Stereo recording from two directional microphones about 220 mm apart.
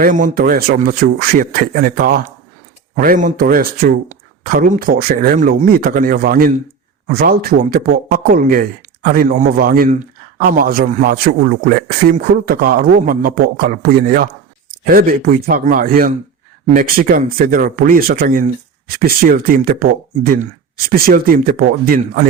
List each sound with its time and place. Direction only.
0.0 s a man's voice: 35° right (ahead or behind)